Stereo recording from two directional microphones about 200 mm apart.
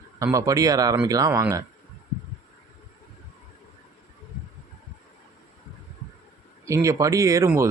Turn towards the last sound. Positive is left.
turn(degrees=-15)  # may be behind; listen again after turning